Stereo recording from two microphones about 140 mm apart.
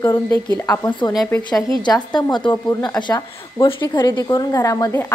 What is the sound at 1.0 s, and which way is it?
A woman's voice, 30° left (ahead or behind).